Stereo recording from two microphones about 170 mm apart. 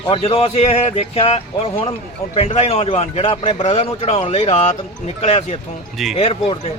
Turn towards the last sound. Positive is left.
turn(degrees=35)  # may be behind; listen again after turning